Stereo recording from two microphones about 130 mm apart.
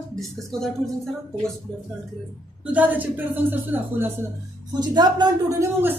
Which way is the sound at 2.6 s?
10° right (ahead or behind).